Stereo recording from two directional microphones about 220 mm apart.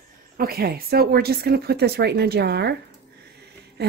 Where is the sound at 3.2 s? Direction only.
50° right (ahead or behind).